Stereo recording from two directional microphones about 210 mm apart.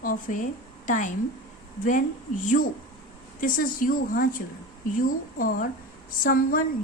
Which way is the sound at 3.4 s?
40° left (ahead or behind).